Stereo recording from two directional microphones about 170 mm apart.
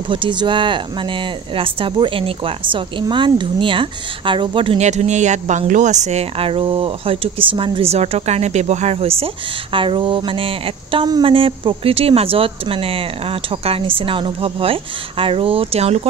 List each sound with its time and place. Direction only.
0.1 s speech: 30° right (ahead or behind)